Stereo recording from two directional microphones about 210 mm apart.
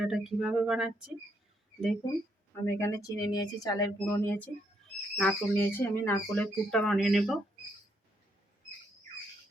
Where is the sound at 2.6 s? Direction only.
15° left (ahead or behind).